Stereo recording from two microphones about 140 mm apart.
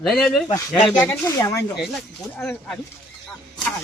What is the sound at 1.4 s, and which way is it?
Speech, 20° left (ahead or behind).